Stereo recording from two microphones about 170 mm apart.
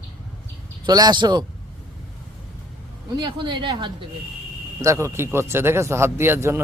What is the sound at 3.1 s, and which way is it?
Speech, 30° right (ahead or behind).